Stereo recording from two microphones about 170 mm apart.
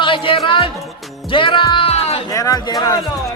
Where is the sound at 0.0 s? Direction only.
30° left (ahead or behind).